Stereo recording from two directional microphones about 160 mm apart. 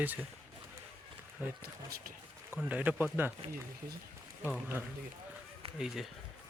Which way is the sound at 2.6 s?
10° right (ahead or behind).